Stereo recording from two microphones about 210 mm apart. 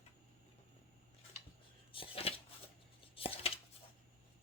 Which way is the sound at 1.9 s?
25° left (ahead or behind).